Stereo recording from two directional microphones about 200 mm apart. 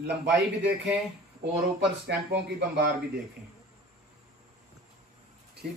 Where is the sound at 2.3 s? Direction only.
55° right (ahead or behind).